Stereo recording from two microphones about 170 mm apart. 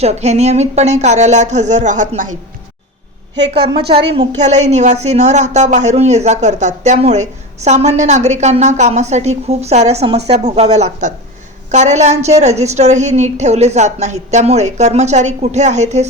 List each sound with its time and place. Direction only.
0.0 s speech: 40° right (ahead or behind)
3.3 s a woman's voice: 85° right
4.4 s speech: 45° right (ahead or behind)